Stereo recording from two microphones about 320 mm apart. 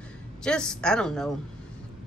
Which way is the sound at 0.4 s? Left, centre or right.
Centre.